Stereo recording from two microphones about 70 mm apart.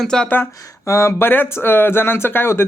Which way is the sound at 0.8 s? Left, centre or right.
Left.